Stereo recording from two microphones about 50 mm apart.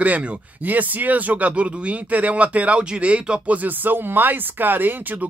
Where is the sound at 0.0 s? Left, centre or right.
Right.